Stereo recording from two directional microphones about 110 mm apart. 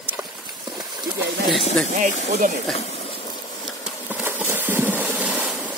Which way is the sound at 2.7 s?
70° left (ahead or behind).